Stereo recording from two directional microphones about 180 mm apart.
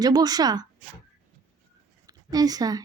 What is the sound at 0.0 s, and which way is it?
Speech, 20° right (ahead or behind).